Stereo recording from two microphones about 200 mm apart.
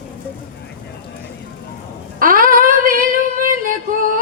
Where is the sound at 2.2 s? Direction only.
45° right (ahead or behind).